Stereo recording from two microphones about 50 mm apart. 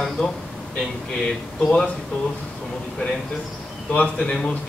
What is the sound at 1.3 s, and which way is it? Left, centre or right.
Speech, centre.